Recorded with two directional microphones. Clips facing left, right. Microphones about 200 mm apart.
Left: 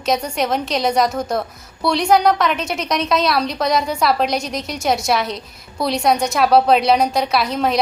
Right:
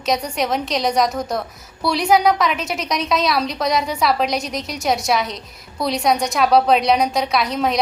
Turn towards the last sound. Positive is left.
turn(degrees=0)  # may be behind; listen again after turning